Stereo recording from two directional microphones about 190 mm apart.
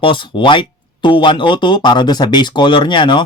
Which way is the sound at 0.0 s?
25° left (ahead or behind).